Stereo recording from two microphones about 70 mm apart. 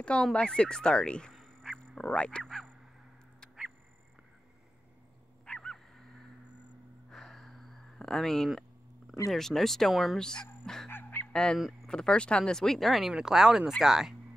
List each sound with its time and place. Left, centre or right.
0.0 s speech: centre
1.3 s a sound: centre
5.4 s wild animals: centre
7.1 s a sound: centre
9.3 s speech: centre
10.9 s honk: left
11.3 s speech: centre